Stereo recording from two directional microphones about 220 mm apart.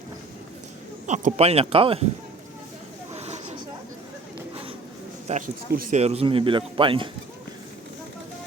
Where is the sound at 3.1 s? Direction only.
30° right (ahead or behind).